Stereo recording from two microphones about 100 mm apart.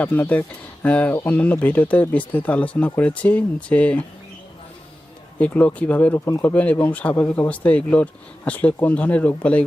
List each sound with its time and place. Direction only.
0.0 s speech: 15° left (ahead or behind)
5.4 s speech: 15° left (ahead or behind)
6.1 s speech: 30° left (ahead or behind)
6.5 s speech: 15° left (ahead or behind)